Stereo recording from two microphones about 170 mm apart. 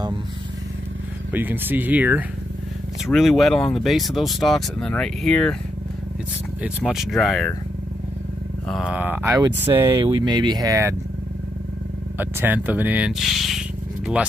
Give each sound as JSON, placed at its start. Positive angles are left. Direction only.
{"t": 1.3, "sound": "speech", "side_deg": -10}
{"t": 6.8, "sound": "speech", "side_deg": 0}
{"t": 8.6, "sound": "speech", "side_deg": -5}
{"t": 9.8, "sound": "speech", "side_deg": -30}
{"t": 12.2, "sound": "speech", "side_deg": -10}